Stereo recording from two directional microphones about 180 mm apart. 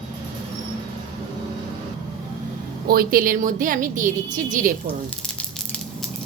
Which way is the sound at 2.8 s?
55° right (ahead or behind).